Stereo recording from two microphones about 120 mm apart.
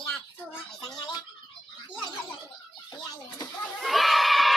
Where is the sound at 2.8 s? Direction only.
35° left (ahead or behind).